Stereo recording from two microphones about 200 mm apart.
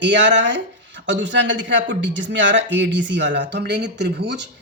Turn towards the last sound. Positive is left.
turn(degrees=-60)  # may be behind; listen again after turning